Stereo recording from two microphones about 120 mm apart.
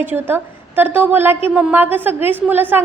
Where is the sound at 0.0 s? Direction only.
15° right (ahead or behind).